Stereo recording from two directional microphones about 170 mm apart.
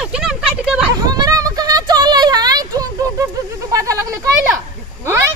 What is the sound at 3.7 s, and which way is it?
Speech, 20° right (ahead or behind).